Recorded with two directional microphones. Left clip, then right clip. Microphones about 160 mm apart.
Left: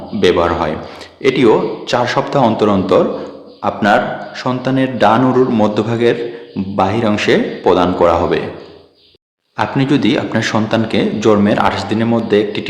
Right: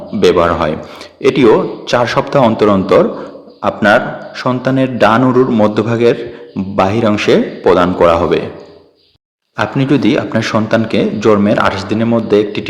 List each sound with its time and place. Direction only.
0.2 s a man's voice: 25° right (ahead or behind)
9.6 s a man's voice: 15° right (ahead or behind)